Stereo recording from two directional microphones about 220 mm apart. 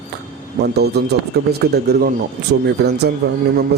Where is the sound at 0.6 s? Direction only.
45° right (ahead or behind).